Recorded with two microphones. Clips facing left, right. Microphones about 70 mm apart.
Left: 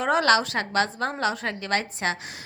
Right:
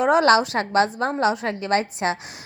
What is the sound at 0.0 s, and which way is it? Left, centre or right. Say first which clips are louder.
A woman's voice: right 4 dB; centre.